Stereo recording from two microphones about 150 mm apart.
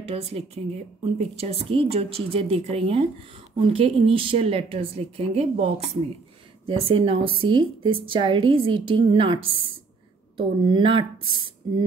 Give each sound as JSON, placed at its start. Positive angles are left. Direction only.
{"t": 0.0, "sound": "a woman's voice", "side_deg": -40}